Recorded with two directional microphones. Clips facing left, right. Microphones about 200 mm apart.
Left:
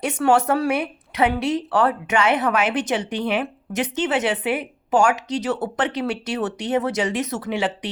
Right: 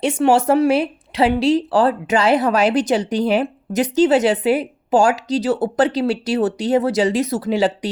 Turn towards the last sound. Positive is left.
turn(degrees=-35)  # may be behind; listen again after turning